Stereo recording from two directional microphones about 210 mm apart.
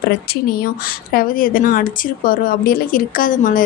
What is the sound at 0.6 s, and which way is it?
A woman's voice, 45° left (ahead or behind).